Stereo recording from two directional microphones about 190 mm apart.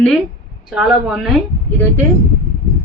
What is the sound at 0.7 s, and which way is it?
Speech, 5° right (ahead or behind).